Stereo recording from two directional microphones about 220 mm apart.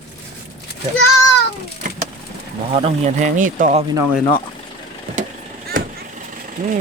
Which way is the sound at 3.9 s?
10° right (ahead or behind).